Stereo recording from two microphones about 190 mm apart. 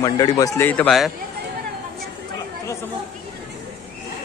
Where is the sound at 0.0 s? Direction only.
20° left (ahead or behind); by 1.1 s centre (ahead or behind).